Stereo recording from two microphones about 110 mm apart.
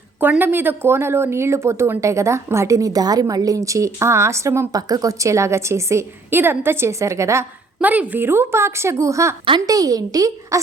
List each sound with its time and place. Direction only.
0.2 s a woman's voice: 15° right (ahead or behind)
7.8 s a woman's voice: 15° right (ahead or behind); by 10.6 s 35° right (ahead or behind)